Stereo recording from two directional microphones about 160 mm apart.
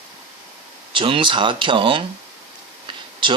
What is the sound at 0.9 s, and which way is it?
Speech, 30° right (ahead or behind).